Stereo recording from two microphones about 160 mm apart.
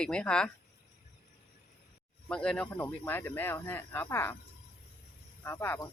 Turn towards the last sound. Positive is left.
turn(degrees=15)  # may be behind; listen again after turning